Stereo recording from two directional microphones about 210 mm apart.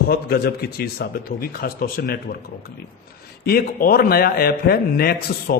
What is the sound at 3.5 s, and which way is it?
A man's voice, 45° left (ahead or behind).